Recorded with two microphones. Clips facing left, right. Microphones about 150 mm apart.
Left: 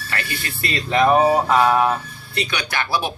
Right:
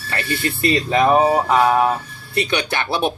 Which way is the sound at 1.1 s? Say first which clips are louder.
Even; 5° right (ahead or behind).